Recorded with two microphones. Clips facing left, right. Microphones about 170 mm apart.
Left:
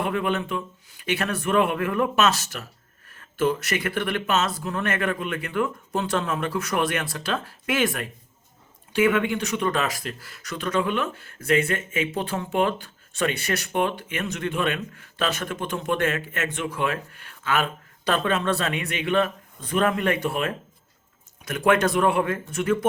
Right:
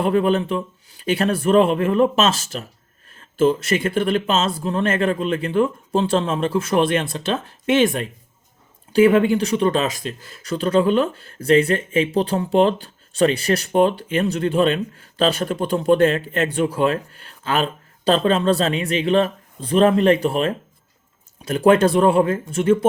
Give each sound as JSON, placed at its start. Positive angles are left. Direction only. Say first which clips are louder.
{"t": 0.0, "sound": "speech", "louder": "right 7 dB", "side_deg": -35}